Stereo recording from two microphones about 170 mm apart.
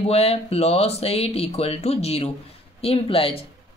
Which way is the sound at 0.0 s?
35° left (ahead or behind).